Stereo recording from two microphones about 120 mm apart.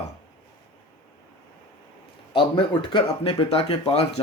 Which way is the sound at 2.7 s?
45° left (ahead or behind).